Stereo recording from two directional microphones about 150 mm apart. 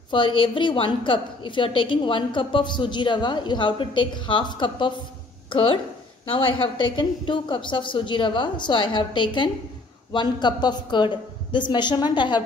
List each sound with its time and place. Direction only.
0.1 s a woman's voice: 35° left (ahead or behind)